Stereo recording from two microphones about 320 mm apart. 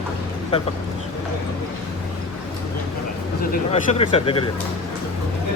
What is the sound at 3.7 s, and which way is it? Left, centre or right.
Speech, centre.